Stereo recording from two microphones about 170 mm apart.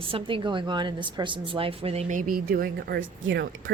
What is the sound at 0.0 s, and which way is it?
A woman's voice, 30° right (ahead or behind).